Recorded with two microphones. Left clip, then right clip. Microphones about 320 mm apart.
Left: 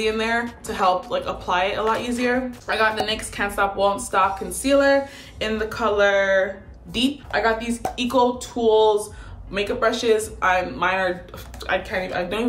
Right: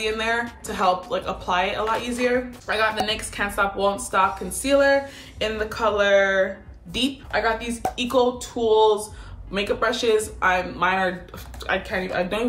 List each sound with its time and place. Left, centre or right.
0.0 s speech: centre